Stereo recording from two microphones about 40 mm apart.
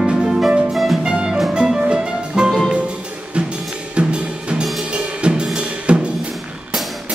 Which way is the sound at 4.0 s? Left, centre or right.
Right.